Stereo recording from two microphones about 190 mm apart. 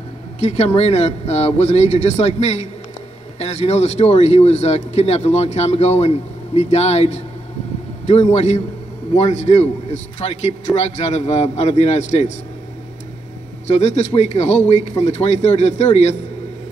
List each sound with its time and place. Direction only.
0.4 s speech: 35° left (ahead or behind)
13.7 s speech: 35° left (ahead or behind)